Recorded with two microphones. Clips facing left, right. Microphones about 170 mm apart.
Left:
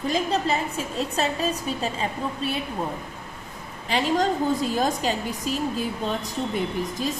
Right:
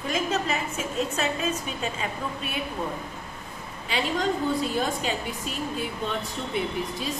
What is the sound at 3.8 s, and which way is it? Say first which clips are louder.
A woman's voice: left 4 dB; 40° left (ahead or behind).